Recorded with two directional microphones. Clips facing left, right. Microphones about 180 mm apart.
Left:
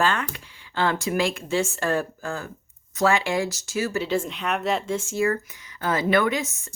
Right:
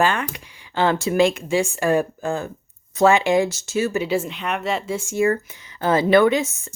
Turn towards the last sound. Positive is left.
turn(degrees=-25)  # may be behind; listen again after turning